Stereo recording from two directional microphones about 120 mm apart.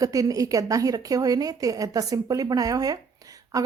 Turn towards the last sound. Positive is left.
turn(degrees=-30)  # may be behind; listen again after turning